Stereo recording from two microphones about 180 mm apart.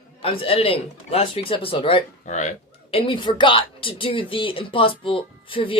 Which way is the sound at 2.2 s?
40° left (ahead or behind).